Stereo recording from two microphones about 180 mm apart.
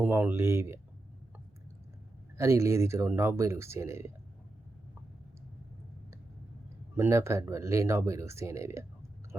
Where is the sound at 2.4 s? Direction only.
15° right (ahead or behind).